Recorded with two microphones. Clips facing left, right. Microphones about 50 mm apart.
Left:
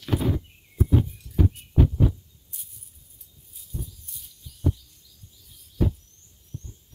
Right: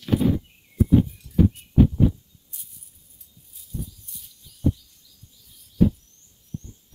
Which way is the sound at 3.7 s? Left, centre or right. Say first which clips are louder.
Right 3 dB; left.